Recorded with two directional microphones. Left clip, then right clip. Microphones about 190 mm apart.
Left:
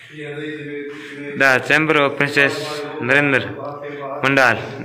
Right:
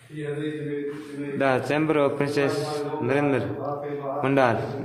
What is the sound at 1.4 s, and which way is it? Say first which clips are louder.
A man's voice: left 9 dB; centre (ahead or behind).